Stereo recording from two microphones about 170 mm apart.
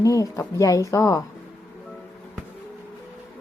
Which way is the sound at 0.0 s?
20° left (ahead or behind).